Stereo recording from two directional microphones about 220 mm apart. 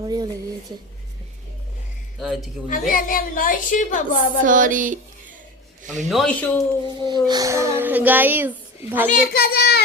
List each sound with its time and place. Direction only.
0.0 s a child's voice: 20° right (ahead or behind)
2.1 s speech: centre (ahead or behind)
2.6 s a woman's voice: 40° left (ahead or behind)
4.4 s a sound: 35° right (ahead or behind)
6.1 s speech: centre (ahead or behind)
6.8 s a child's voice: 20° right (ahead or behind)
9.0 s a child's voice: 40° left (ahead or behind)